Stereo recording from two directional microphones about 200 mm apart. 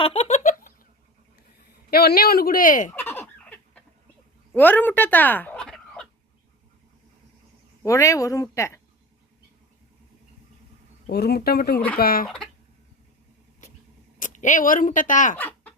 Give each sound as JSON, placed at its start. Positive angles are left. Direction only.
{"t": 0.0, "sound": "a sound", "side_deg": 35}
{"t": 1.9, "sound": "speech", "side_deg": 50}
{"t": 2.9, "sound": "fowl", "side_deg": 10}
{"t": 4.5, "sound": "speech", "side_deg": 10}
{"t": 7.9, "sound": "speech", "side_deg": 15}
{"t": 11.0, "sound": "speech", "side_deg": 55}
{"t": 14.2, "sound": "speech", "side_deg": 40}
{"t": 15.4, "sound": "babbling", "side_deg": 10}